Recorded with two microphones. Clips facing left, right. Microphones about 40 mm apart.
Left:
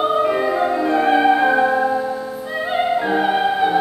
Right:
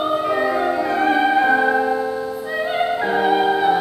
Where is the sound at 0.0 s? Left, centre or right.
Centre.